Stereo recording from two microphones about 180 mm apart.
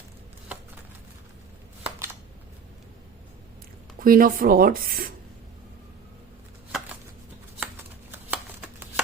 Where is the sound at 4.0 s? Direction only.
55° right (ahead or behind).